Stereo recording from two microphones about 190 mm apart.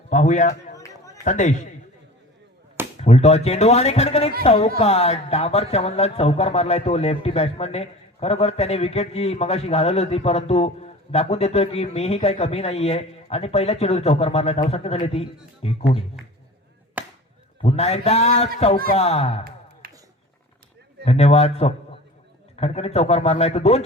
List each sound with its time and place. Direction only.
0.1 s speech: 40° left (ahead or behind)
0.8 s a sound: 15° left (ahead or behind)
1.2 s speech: 40° left (ahead or behind)
3.0 s speech: 35° left (ahead or behind)
17.0 s chop: 10° right (ahead or behind)
17.6 s speech: 35° left (ahead or behind)
19.8 s a sound: 50° right (ahead or behind)
21.0 s speech: 35° left (ahead or behind)